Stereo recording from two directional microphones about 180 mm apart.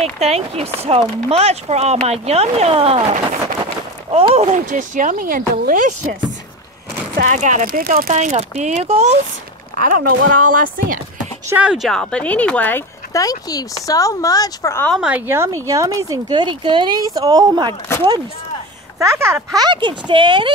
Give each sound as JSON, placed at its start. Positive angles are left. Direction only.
{"t": 0.2, "sound": "speech", "side_deg": -35}
{"t": 4.1, "sound": "speech", "side_deg": -35}
{"t": 7.2, "sound": "speech", "side_deg": -45}
{"t": 9.8, "sound": "speech", "side_deg": -50}
{"t": 11.4, "sound": "speech", "side_deg": -5}
{"t": 14.9, "sound": "speech", "side_deg": -5}
{"t": 18.9, "sound": "speech", "side_deg": -15}